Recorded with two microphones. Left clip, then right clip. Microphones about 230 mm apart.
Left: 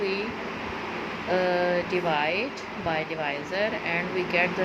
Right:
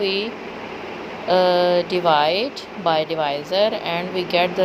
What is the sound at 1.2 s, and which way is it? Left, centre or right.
Speech, centre.